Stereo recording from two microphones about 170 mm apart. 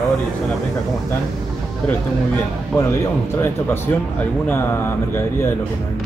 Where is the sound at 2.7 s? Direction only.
10° left (ahead or behind).